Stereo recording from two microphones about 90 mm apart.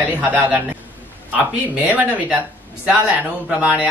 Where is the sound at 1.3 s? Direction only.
15° right (ahead or behind).